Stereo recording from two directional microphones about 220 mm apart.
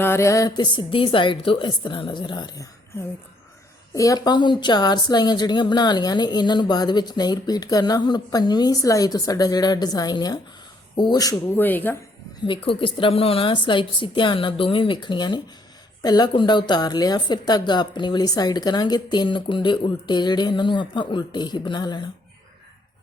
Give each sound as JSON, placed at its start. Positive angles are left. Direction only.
{"t": 0.0, "sound": "a woman's voice", "side_deg": 10}
{"t": 3.9, "sound": "a woman's voice", "side_deg": 15}
{"t": 12.5, "sound": "a woman's voice", "side_deg": 25}